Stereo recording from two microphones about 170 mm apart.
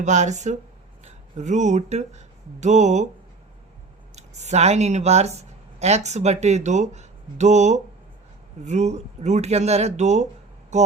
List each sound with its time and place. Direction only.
0.0 s speech: 45° right (ahead or behind)
4.1 s speech: 40° right (ahead or behind)